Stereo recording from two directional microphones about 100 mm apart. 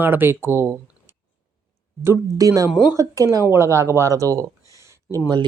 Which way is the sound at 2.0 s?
30° right (ahead or behind).